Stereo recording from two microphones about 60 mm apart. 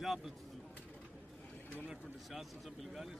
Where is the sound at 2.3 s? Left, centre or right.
Centre.